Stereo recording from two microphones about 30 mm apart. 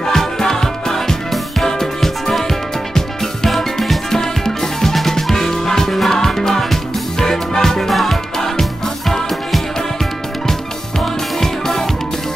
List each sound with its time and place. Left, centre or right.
0.1 s music: centre
3.4 s music: centre
4.1 s music: centre
7.9 s music: centre
11.3 s music: centre